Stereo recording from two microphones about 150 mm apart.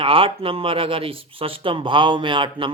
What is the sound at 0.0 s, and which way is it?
Speech, 35° right (ahead or behind).